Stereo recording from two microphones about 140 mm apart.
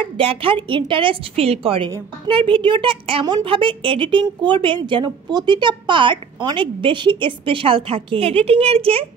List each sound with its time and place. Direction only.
0.2 s a woman's voice: 40° right (ahead or behind)